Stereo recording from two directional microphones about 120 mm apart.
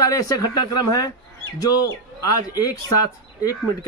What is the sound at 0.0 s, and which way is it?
Speech, 30° left (ahead or behind).